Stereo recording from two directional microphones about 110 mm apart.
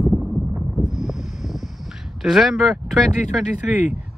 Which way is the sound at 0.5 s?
5° right (ahead or behind).